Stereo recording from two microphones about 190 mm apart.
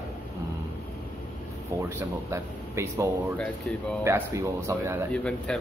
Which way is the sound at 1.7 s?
10° right (ahead or behind).